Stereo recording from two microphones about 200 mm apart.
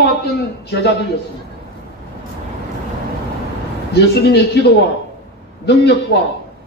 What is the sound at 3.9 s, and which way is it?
A woman's voice, 55° left (ahead or behind).